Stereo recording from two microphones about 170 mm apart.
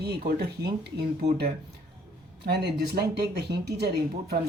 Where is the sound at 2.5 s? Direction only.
75° right (ahead or behind).